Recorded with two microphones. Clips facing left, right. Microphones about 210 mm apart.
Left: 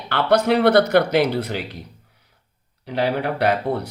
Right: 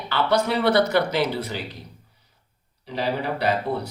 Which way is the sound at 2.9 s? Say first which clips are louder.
Left 4 dB; 60° left (ahead or behind).